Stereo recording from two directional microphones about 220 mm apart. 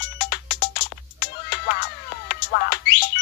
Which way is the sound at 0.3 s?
45° left (ahead or behind).